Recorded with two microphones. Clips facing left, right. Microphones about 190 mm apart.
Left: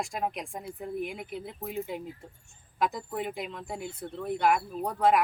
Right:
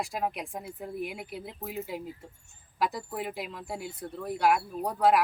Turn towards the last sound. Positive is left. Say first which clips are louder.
# even
turn(degrees=-5)  # may be behind; listen again after turning